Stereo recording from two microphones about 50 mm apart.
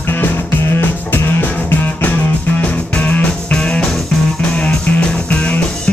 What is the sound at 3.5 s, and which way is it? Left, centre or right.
Music, centre.